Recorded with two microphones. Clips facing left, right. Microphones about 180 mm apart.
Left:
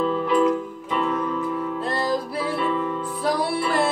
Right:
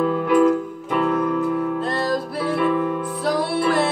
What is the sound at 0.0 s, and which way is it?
Keyboard, 55° right (ahead or behind).